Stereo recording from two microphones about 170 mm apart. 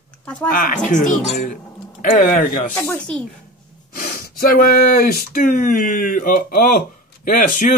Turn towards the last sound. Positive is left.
turn(degrees=50)  # may be behind; listen again after turning